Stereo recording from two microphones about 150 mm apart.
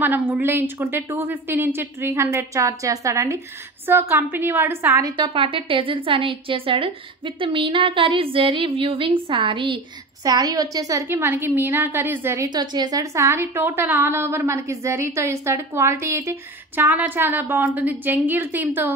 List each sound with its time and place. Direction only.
0.0 s a woman's voice: 15° right (ahead or behind)
5.1 s a woman's voice: 35° right (ahead or behind); by 12.4 s 15° right (ahead or behind)
12.4 s a woman's voice: 30° right (ahead or behind); by 18.9 s 10° right (ahead or behind)